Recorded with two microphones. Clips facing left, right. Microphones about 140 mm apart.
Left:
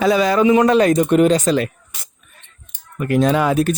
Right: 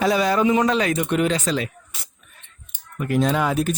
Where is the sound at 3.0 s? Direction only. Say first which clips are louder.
Left 5 dB; 75° left (ahead or behind).